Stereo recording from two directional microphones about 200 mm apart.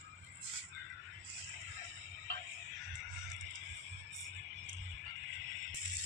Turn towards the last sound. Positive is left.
turn(degrees=-65)  # may be behind; listen again after turning